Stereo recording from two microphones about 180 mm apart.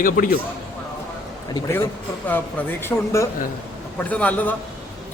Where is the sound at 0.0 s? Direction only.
50° left (ahead or behind).